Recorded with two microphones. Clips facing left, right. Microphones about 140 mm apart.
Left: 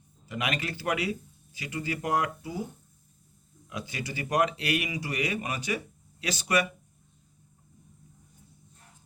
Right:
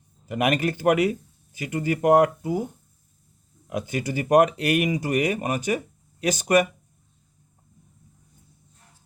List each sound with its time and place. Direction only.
0.3 s speech: 50° right (ahead or behind)
3.7 s speech: 50° right (ahead or behind)